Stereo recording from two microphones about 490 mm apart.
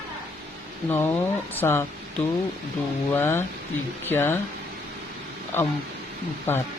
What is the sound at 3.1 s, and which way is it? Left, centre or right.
Speech, centre.